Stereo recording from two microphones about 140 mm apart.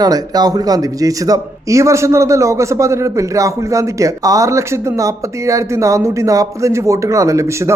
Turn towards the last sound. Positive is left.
turn(degrees=-20)  # may be behind; listen again after turning